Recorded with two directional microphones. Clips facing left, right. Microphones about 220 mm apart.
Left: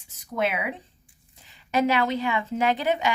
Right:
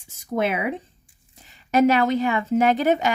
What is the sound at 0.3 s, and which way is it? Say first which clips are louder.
Speech: right 4 dB; 45° right (ahead or behind).